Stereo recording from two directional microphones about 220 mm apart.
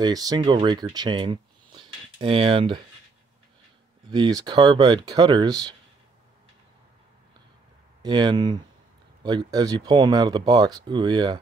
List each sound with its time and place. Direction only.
0.0 s speech: 15° right (ahead or behind)
4.1 s speech: 20° right (ahead or behind)
8.0 s speech: 20° right (ahead or behind)